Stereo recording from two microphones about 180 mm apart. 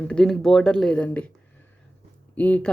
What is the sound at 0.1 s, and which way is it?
Speech, 5° left (ahead or behind).